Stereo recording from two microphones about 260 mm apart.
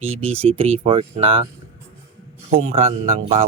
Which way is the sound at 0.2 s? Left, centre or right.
Right.